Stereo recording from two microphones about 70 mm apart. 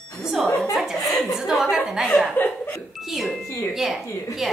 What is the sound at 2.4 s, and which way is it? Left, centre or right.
Laughter, left.